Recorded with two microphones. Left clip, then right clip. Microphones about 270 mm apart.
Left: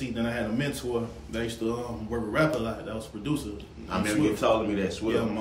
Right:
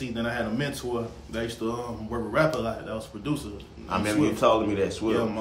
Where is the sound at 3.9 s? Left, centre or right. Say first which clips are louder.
Right 1 dB; right.